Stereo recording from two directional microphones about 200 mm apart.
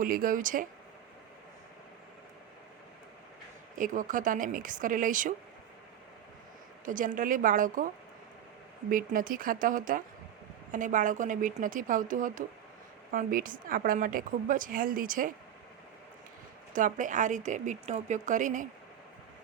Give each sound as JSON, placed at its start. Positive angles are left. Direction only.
{"t": 0.0, "sound": "a woman's voice", "side_deg": -45}
{"t": 3.8, "sound": "a woman's voice", "side_deg": -40}
{"t": 6.8, "sound": "a woman's voice", "side_deg": -40}
{"t": 8.9, "sound": "a woman's voice", "side_deg": -45}
{"t": 16.7, "sound": "a woman's voice", "side_deg": -40}